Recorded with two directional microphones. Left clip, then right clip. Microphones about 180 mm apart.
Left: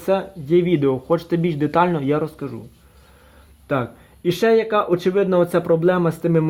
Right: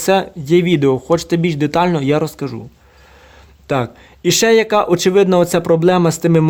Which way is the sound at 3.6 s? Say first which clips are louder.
Right 4 dB; 25° right (ahead or behind).